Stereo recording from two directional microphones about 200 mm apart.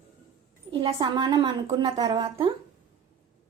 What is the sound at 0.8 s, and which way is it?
A woman's voice, 20° right (ahead or behind).